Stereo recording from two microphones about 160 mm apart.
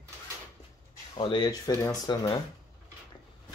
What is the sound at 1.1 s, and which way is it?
Speech, 30° left (ahead or behind).